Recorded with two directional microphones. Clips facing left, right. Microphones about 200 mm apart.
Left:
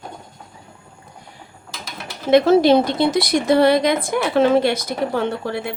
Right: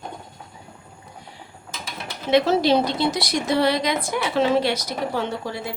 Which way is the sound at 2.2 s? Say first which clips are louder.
Left 5 dB; 50° left (ahead or behind).